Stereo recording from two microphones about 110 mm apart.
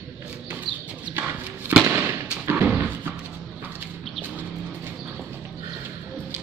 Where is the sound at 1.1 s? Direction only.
15° right (ahead or behind).